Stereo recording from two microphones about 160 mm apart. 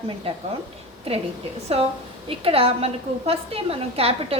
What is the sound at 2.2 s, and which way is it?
A woman's voice, 35° right (ahead or behind).